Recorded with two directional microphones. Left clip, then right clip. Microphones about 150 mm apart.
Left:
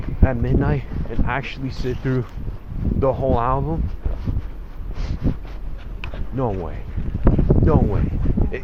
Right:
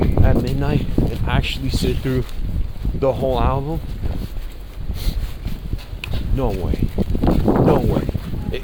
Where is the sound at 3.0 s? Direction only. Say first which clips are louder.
Right 1 dB; 20° right (ahead or behind).